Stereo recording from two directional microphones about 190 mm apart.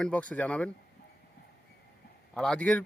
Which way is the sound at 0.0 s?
5° left (ahead or behind).